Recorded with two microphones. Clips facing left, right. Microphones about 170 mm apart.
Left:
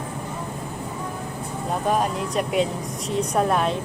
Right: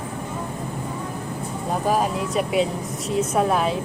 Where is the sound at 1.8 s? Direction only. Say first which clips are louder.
Right 1 dB; centre (ahead or behind).